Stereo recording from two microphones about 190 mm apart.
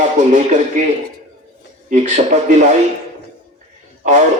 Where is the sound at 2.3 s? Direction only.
40° right (ahead or behind).